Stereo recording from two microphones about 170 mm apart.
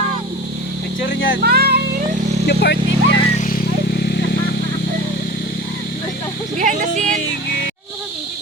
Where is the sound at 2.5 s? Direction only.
85° left.